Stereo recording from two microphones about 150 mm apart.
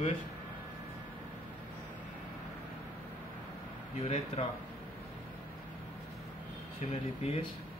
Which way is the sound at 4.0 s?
45° left (ahead or behind).